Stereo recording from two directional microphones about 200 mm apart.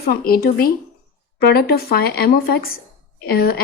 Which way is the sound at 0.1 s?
50° left (ahead or behind).